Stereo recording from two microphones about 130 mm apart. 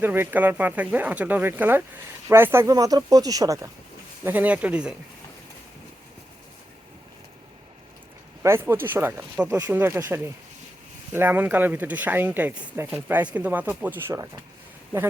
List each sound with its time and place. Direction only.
0.0 s speech: 15° right (ahead or behind)
4.2 s speech: 15° right (ahead or behind)
8.4 s speech: 20° right (ahead or behind)
14.1 s speech: 25° right (ahead or behind)